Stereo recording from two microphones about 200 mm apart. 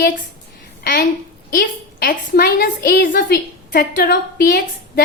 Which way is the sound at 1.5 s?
50° left (ahead or behind).